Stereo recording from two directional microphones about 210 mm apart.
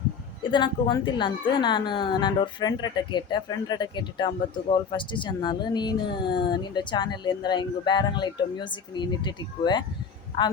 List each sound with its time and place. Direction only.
0.5 s speech: 20° left (ahead or behind)